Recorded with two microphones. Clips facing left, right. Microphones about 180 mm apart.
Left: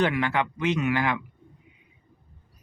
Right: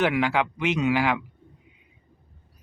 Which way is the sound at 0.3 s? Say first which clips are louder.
Right 1 dB; 10° right (ahead or behind).